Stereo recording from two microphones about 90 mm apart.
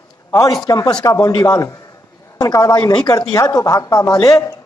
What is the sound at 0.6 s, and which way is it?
A man's voice, 40° left (ahead or behind).